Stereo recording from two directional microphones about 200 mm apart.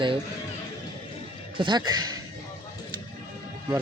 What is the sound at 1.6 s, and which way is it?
Speech, 20° right (ahead or behind).